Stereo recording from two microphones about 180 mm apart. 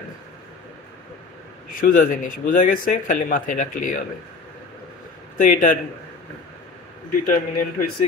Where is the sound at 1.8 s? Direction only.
50° left (ahead or behind).